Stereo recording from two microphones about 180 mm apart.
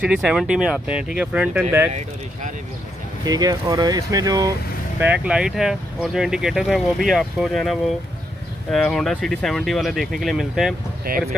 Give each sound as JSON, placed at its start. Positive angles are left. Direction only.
{"t": 0.0, "sound": "speech", "side_deg": -5}
{"t": 3.3, "sound": "speech", "side_deg": -20}
{"t": 5.0, "sound": "speech", "side_deg": -5}
{"t": 11.1, "sound": "speech", "side_deg": -55}